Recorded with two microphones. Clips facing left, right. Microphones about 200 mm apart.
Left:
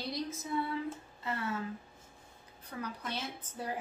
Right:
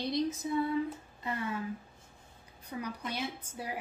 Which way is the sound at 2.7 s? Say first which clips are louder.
Right 2 dB; 15° right (ahead or behind).